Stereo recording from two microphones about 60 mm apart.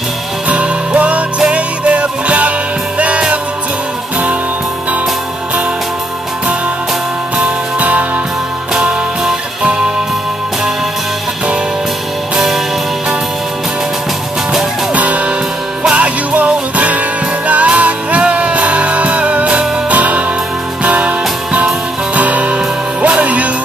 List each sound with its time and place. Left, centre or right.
0.5 s music: right
7.3 s music: right
9.2 s music: centre
15.0 s music: right